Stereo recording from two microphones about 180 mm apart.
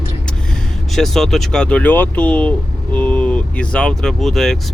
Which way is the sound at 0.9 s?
Centre (ahead or behind).